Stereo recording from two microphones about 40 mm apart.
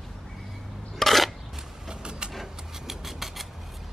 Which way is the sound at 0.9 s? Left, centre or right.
Centre.